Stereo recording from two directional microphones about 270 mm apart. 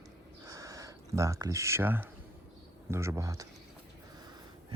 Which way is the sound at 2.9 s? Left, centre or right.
Centre.